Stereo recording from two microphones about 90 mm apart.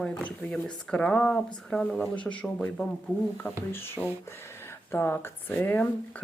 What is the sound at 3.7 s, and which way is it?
Speech, 25° left (ahead or behind).